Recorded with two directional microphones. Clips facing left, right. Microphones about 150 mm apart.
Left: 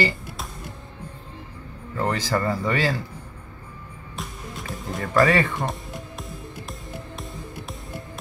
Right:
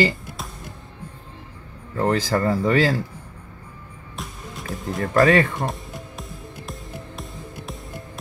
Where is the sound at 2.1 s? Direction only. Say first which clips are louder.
Right 4 dB; 45° right (ahead or behind).